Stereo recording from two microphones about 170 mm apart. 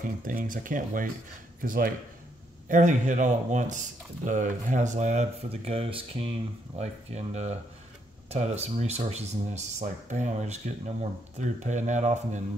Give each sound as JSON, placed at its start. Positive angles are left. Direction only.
{"t": 0.0, "sound": "speech", "side_deg": -55}
{"t": 2.7, "sound": "speech", "side_deg": -45}